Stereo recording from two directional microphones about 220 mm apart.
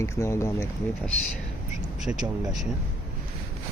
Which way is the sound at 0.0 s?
10° left (ahead or behind).